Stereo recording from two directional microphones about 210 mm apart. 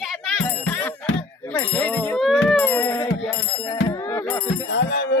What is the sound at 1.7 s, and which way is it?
Music, 5° left (ahead or behind).